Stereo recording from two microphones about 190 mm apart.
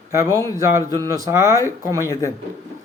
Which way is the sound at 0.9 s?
15° left (ahead or behind).